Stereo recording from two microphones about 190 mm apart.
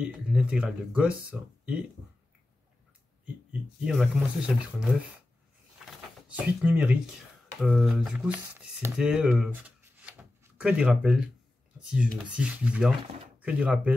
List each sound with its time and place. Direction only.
0.0 s speech: 5° right (ahead or behind)
3.8 s speech: 5° right (ahead or behind)
5.9 s a sound: 5° right (ahead or behind)
7.6 s speech: centre (ahead or behind)